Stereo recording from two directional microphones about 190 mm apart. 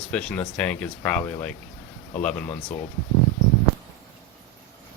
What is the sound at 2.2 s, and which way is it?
Speech, 5° left (ahead or behind).